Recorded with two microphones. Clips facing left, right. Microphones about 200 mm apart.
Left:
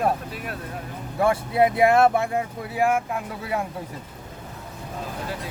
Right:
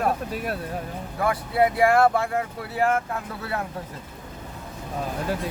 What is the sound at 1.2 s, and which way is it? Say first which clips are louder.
Speech: left 2 dB; 25° left (ahead or behind).